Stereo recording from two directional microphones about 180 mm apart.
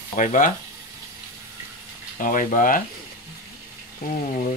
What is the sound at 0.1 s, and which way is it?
Speech, 45° left (ahead or behind).